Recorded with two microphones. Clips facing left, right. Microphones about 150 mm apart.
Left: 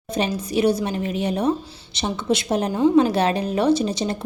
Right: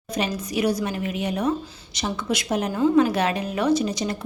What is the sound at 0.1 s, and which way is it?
A woman's voice, 30° left (ahead or behind).